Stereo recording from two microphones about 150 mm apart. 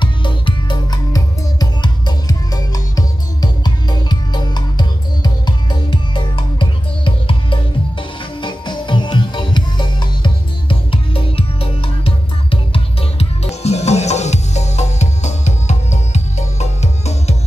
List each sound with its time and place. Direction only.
0.0 s music: 35° left (ahead or behind)